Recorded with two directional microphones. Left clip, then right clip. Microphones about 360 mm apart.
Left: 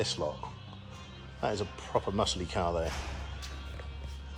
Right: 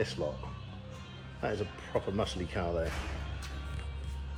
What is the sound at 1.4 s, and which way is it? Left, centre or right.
Speech, centre.